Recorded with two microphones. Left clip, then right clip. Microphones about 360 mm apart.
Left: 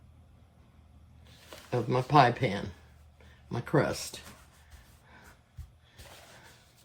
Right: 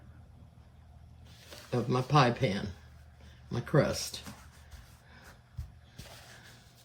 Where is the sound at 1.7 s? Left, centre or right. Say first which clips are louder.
Left 4 dB; centre.